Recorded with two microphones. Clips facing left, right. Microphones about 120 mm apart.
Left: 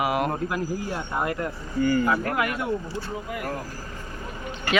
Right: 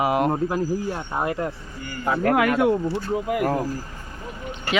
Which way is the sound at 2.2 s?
90° right.